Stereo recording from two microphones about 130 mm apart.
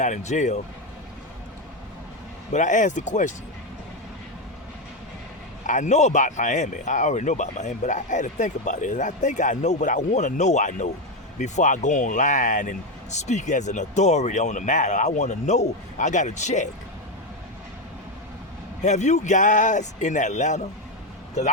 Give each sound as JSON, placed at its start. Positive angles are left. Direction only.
{"t": 0.0, "sound": "speech", "side_deg": 65}
{"t": 2.5, "sound": "speech", "side_deg": 70}
{"t": 5.6, "sound": "speech", "side_deg": 70}
{"t": 18.8, "sound": "speech", "side_deg": 65}